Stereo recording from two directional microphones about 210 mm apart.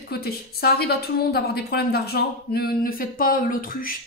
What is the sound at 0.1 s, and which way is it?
Speech, 45° left (ahead or behind).